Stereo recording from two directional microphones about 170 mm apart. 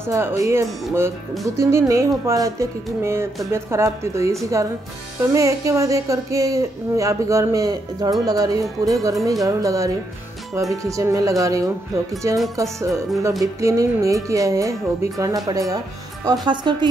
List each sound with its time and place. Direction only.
0.1 s a woman's voice: 15° right (ahead or behind)